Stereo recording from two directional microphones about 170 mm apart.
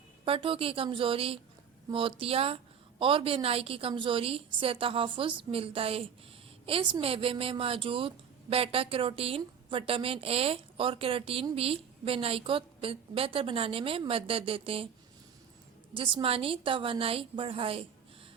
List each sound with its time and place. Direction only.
0.3 s a woman's voice: 30° right (ahead or behind)
16.0 s a woman's voice: 30° right (ahead or behind)